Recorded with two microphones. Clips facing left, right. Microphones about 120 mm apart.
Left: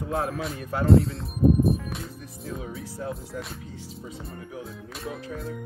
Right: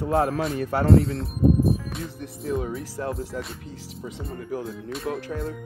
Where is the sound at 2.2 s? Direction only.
75° right (ahead or behind).